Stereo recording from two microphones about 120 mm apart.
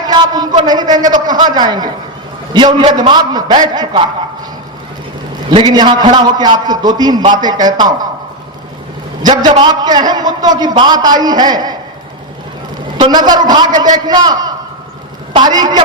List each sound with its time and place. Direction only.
0.1 s a sound: 35° right (ahead or behind)
0.6 s a man's voice: 35° right (ahead or behind)
5.5 s a man's voice: 40° right (ahead or behind)
9.2 s a man's voice: 35° right (ahead or behind)
13.0 s a man's voice: 35° right (ahead or behind)